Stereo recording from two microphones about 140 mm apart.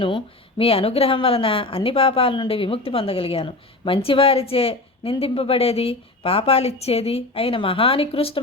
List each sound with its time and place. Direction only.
0.6 s a woman's voice: 45° left (ahead or behind)